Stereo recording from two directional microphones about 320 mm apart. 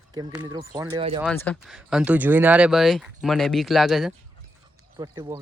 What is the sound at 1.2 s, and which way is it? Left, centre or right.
Speech, centre.